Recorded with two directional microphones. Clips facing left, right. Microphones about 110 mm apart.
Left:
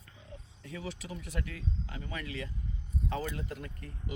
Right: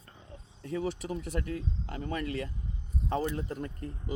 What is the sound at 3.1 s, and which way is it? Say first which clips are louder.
Speech: right 6 dB; 35° right (ahead or behind).